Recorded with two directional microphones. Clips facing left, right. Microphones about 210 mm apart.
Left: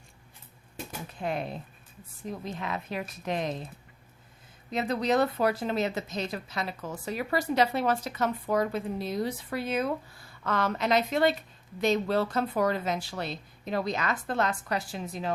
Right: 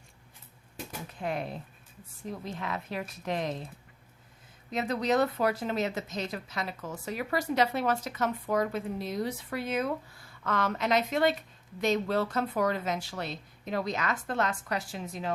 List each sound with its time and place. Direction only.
0.9 s speech: 25° left (ahead or behind)
4.7 s speech: 30° left (ahead or behind)